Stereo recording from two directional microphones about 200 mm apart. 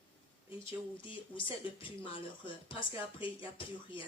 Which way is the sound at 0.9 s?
25° left (ahead or behind).